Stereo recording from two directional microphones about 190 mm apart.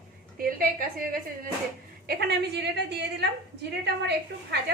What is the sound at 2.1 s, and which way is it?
A woman's voice, 60° right (ahead or behind).